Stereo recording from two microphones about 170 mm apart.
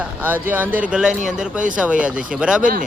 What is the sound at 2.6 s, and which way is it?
Speech, 50° right (ahead or behind).